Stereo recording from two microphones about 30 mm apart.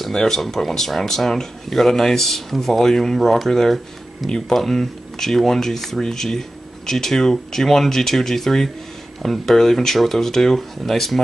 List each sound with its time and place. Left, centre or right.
0.1 s speech: left
0.5 s speech: centre
4.2 s speech: centre